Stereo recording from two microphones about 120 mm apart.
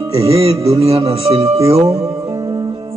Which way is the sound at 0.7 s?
55° right (ahead or behind).